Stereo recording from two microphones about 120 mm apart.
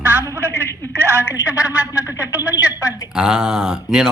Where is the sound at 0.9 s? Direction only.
20° right (ahead or behind).